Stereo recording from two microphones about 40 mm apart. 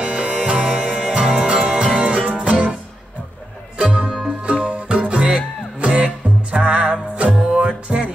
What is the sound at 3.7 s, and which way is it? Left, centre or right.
Music, right.